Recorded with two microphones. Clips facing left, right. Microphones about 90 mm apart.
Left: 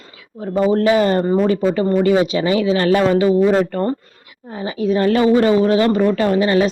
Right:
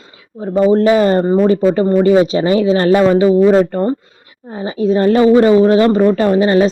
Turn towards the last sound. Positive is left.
turn(degrees=-30)  # may be behind; listen again after turning